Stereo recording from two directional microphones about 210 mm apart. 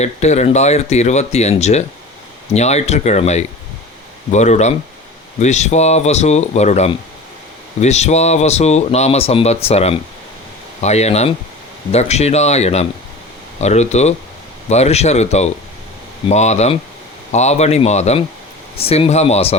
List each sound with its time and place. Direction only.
0.0 s speech: 30° left (ahead or behind)